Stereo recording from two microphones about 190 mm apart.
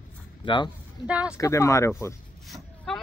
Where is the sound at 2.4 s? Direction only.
Centre (ahead or behind).